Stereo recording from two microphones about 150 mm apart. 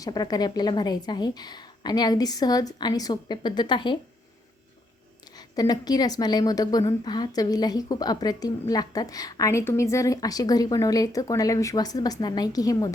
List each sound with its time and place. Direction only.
0.0 s a woman's voice: 25° left (ahead or behind)
5.4 s a woman's voice: 25° left (ahead or behind)